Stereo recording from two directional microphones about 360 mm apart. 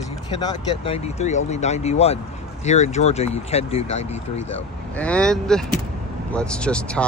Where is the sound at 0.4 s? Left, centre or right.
Centre.